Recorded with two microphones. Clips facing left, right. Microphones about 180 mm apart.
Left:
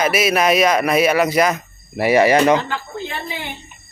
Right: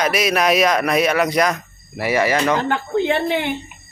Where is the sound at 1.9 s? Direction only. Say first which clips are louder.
Left 5 dB; 20° left (ahead or behind).